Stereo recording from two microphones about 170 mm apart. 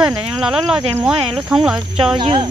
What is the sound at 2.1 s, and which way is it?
Speech, 25° right (ahead or behind).